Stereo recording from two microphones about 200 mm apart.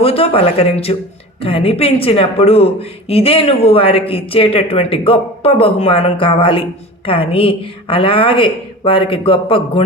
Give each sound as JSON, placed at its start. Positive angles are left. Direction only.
{"t": 0.0, "sound": "speech", "side_deg": 30}